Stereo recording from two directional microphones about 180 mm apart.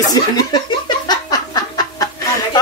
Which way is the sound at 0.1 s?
25° left (ahead or behind).